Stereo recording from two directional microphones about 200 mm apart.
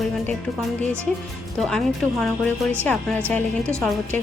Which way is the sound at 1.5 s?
Centre (ahead or behind).